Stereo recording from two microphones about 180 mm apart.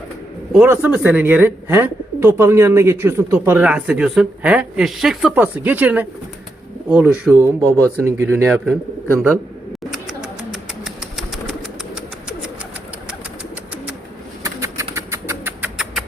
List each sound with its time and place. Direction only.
0.5 s speech: 10° right (ahead or behind)
7.8 s speech: 10° left (ahead or behind)
8.0 s speech: 15° right (ahead or behind)
9.9 s bird: centre (ahead or behind)
14.4 s rodents: 20° right (ahead or behind)